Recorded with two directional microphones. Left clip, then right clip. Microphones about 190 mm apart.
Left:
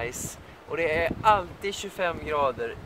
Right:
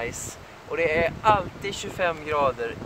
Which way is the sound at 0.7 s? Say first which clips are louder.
Right 3 dB; 15° left (ahead or behind).